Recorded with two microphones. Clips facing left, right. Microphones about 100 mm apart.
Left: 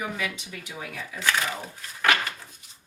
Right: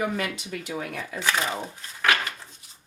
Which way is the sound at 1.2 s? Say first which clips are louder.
Even; 25° right (ahead or behind).